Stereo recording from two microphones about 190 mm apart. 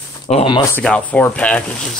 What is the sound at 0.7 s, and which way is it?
Speech, 5° left (ahead or behind).